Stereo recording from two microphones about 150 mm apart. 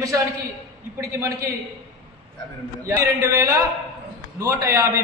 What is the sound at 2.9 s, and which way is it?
A man's voice, 20° right (ahead or behind).